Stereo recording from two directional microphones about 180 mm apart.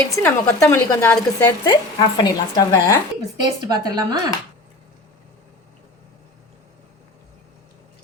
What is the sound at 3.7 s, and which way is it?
Speech, 20° right (ahead or behind).